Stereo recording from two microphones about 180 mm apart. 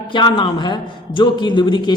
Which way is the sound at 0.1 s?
25° left (ahead or behind).